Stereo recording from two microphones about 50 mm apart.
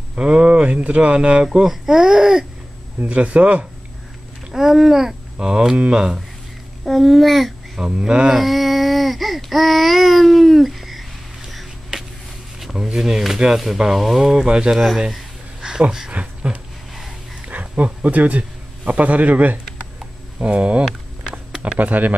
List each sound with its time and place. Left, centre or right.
0.1 s speech: centre
3.0 s speech: right
4.5 s speech: centre
6.8 s speech: centre
8.3 s babbling: centre
12.7 s speech: centre
15.0 s a sound: centre
16.1 s speech: right
17.5 s a sound: right
17.8 s a man's voice: right
21.3 s a sound: centre
21.7 s a man's voice: right